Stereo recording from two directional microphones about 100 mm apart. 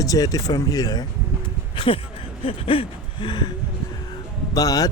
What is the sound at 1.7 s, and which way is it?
Speech, 60° left (ahead or behind).